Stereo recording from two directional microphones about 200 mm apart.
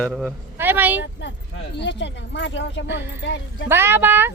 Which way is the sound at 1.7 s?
60° left (ahead or behind).